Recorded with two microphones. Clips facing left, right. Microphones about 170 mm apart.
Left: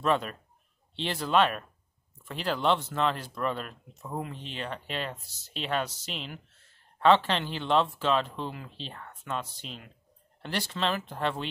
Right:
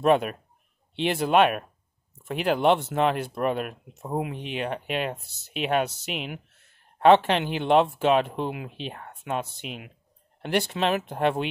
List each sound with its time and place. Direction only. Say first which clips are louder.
0.0 s speech: right 7 dB; 60° right (ahead or behind)